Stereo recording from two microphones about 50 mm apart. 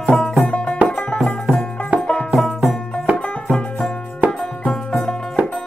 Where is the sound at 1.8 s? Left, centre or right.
Left.